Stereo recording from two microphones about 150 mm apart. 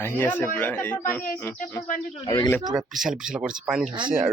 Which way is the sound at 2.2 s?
30° left (ahead or behind).